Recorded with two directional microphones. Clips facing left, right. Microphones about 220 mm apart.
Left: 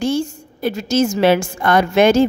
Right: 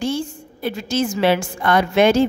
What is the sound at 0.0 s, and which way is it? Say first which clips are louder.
A woman's voice: left 4 dB; 45° left (ahead or behind).